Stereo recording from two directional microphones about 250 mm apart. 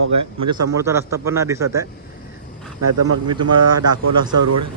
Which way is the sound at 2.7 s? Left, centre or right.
Right.